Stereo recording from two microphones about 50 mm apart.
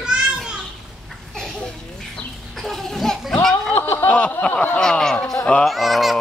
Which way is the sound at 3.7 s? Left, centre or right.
Left.